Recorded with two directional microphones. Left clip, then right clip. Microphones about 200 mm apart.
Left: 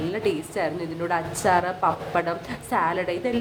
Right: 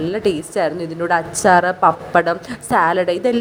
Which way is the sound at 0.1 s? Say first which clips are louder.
Right 7 dB; 30° right (ahead or behind).